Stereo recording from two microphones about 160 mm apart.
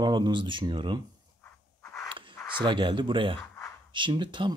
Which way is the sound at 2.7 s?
30° right (ahead or behind).